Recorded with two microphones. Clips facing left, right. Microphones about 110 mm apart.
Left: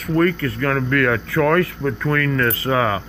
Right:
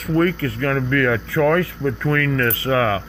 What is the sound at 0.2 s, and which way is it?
Speech, 30° right (ahead or behind).